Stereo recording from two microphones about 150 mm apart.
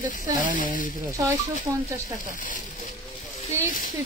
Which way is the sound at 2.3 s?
60° left (ahead or behind).